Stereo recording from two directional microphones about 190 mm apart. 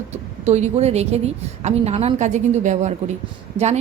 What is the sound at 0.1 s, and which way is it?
Speech, 35° right (ahead or behind).